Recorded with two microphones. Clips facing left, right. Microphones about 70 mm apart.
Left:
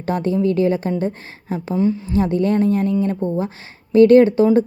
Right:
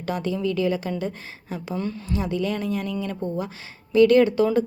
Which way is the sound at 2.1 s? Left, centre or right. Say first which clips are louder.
Left 7 dB; left.